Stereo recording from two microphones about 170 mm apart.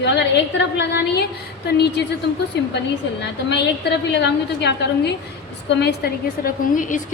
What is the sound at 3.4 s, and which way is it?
A woman's voice, 85° left.